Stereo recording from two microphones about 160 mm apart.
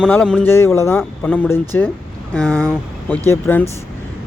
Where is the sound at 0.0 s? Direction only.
5° left (ahead or behind).